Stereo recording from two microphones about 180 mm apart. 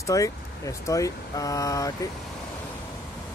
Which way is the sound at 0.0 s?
20° left (ahead or behind).